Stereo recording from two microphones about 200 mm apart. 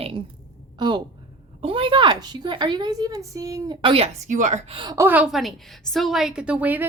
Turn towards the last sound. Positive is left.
turn(degrees=-10)  # may be behind; listen again after turning